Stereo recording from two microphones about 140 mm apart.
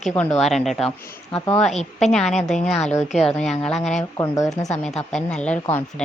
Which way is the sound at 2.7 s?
55° left (ahead or behind).